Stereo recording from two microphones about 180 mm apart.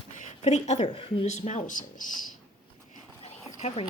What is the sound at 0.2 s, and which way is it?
A woman's voice, 40° left (ahead or behind).